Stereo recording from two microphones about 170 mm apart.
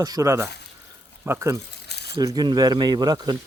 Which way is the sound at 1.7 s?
75° left (ahead or behind).